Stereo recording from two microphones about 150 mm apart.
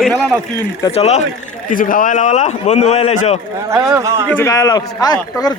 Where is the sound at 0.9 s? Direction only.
45° left (ahead or behind).